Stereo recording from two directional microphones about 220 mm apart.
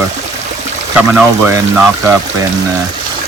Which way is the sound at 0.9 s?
5° right (ahead or behind).